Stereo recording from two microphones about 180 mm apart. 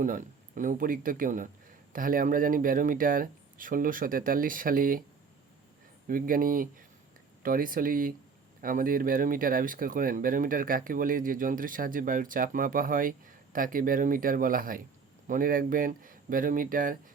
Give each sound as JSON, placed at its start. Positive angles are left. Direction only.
{"t": 0.0, "sound": "speech", "side_deg": -45}
{"t": 6.1, "sound": "speech", "side_deg": -50}